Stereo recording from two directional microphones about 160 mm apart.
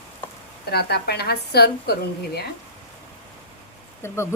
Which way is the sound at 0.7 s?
90° left.